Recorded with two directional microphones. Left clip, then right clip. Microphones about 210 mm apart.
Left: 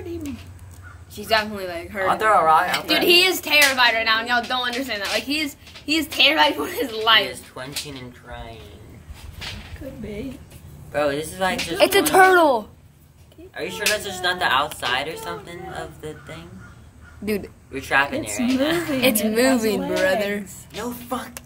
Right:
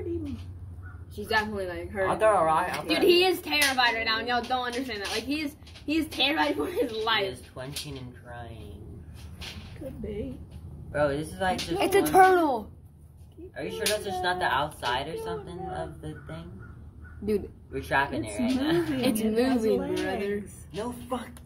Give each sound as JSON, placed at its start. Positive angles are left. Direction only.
{"t": 1.2, "sound": "speech", "side_deg": 30}
{"t": 10.9, "sound": "speech", "side_deg": 50}
{"t": 11.8, "sound": "speech", "side_deg": 25}
{"t": 13.6, "sound": "speech", "side_deg": 50}
{"t": 17.7, "sound": "speech", "side_deg": 50}
{"t": 18.9, "sound": "speech", "side_deg": 35}